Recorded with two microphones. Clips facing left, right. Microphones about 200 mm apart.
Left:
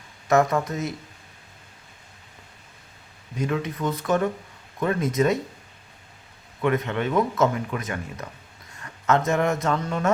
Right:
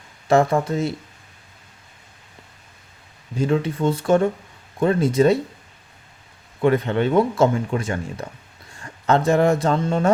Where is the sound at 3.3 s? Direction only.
30° right (ahead or behind).